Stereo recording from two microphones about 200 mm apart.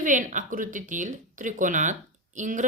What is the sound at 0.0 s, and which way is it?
Speech, 40° right (ahead or behind).